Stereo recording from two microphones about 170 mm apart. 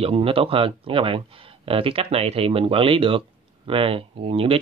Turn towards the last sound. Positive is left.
turn(degrees=-35)  # may be behind; listen again after turning